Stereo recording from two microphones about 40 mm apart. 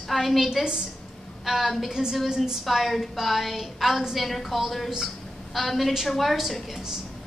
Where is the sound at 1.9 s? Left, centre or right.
Centre.